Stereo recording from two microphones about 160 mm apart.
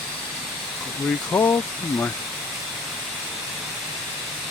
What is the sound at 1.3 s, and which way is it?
Speech, 15° left (ahead or behind).